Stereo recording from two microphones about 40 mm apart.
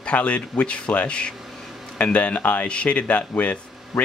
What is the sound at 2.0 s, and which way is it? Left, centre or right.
Speech, left.